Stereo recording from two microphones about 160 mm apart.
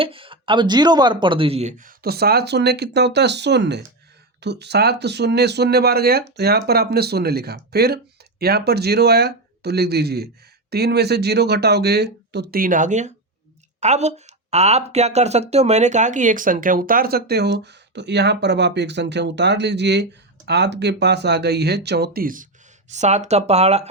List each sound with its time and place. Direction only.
0.0 s speech: 35° right (ahead or behind)
1.8 s speech: 75° right (ahead or behind)
22.9 s speech: 45° right (ahead or behind)